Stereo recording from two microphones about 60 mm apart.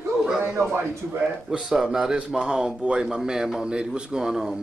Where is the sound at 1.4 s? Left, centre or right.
Centre.